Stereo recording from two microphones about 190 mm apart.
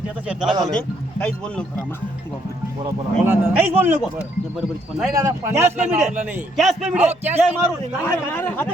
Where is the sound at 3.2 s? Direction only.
10° right (ahead or behind).